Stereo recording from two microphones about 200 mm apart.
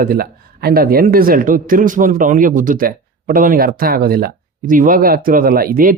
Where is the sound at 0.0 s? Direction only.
50° right (ahead or behind).